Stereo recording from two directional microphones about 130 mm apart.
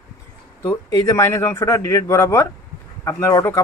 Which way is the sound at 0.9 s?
25° left (ahead or behind).